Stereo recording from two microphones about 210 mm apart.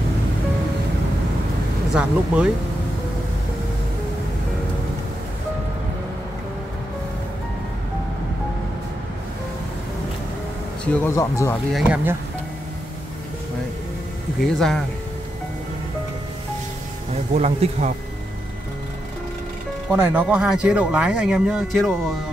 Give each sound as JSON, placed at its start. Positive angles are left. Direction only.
{"t": 2.0, "sound": "speech", "side_deg": -5}
{"t": 10.9, "sound": "speech", "side_deg": 15}
{"t": 11.7, "sound": "speech", "side_deg": -10}
{"t": 14.4, "sound": "speech", "side_deg": 0}
{"t": 17.1, "sound": "speech", "side_deg": -30}
{"t": 19.9, "sound": "speech", "side_deg": -5}